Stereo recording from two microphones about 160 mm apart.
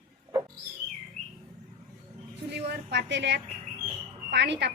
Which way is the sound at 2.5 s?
90° right.